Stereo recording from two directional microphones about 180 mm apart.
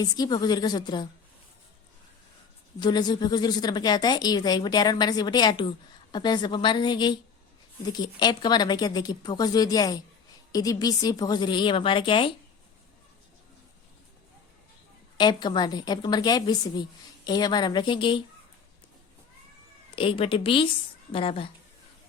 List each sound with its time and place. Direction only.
0.0 s a woman's voice: 20° left (ahead or behind)
2.7 s a woman's voice: 25° left (ahead or behind)
15.2 s a woman's voice: 25° left (ahead or behind)
20.0 s a woman's voice: 30° left (ahead or behind)